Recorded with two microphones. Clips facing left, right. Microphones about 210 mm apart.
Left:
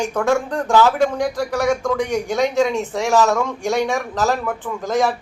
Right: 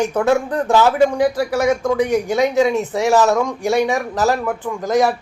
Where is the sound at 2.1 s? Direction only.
5° right (ahead or behind).